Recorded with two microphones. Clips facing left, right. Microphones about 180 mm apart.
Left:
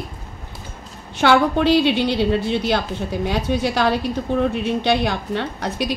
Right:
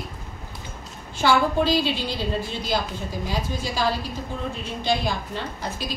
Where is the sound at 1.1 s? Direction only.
65° left (ahead or behind).